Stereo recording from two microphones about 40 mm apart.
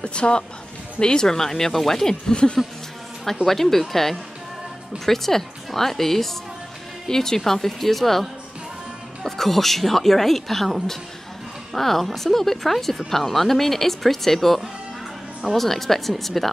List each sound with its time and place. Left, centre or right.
0.0 s a woman's voice: left
3.4 s speech: centre